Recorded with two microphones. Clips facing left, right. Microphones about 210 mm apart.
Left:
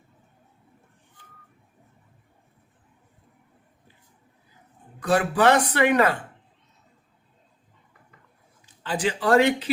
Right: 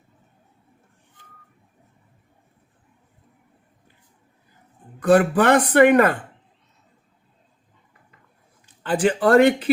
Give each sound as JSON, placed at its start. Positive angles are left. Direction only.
{"t": 4.9, "sound": "speech", "side_deg": -55}
{"t": 8.6, "sound": "a man's voice", "side_deg": -55}